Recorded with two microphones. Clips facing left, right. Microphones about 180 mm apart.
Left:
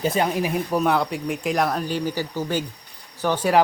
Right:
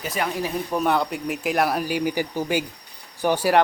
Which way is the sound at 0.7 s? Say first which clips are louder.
Right 1 dB; centre (ahead or behind).